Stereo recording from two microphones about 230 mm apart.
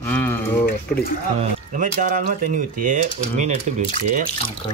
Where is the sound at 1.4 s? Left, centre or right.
Right.